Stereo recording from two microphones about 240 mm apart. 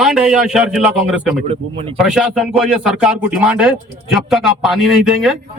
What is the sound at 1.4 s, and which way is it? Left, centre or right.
Speech, right.